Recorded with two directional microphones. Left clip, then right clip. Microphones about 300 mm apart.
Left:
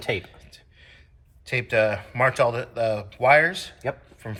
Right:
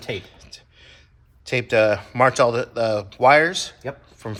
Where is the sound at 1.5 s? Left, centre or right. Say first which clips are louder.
Right 4 dB; centre.